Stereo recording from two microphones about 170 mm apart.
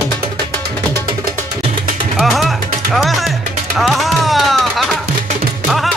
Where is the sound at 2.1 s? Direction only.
Centre (ahead or behind).